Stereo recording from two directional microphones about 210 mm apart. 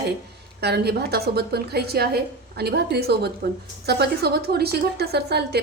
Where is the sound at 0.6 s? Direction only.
50° right (ahead or behind).